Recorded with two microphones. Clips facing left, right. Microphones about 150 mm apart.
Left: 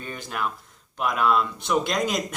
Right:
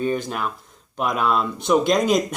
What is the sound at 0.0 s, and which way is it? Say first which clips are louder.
Speech: right 7 dB; 20° right (ahead or behind).